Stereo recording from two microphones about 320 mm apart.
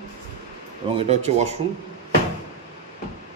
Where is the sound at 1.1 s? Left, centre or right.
Centre.